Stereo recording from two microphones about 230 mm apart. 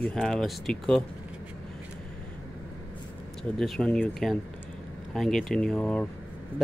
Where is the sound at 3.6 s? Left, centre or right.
Centre.